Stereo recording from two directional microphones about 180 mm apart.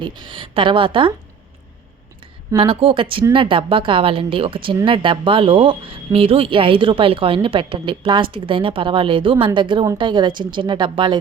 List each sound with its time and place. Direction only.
0.0 s a woman's voice: 25° right (ahead or behind)
2.6 s a woman's voice: 30° right (ahead or behind)